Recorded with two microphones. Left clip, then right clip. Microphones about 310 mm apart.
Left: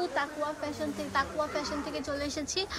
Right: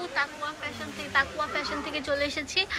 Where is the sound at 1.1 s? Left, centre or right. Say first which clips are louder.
Right 4 dB; centre.